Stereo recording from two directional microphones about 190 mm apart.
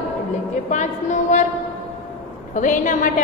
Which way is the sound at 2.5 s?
40° left (ahead or behind).